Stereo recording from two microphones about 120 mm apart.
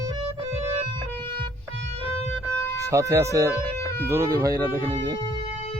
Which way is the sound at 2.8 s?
25° right (ahead or behind).